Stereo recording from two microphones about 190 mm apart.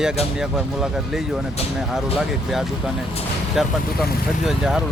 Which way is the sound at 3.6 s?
Centre (ahead or behind).